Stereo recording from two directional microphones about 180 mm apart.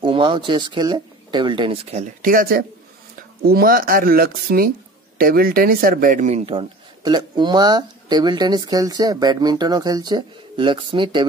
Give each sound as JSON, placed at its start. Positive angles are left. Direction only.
{"t": 0.0, "sound": "speech", "side_deg": -30}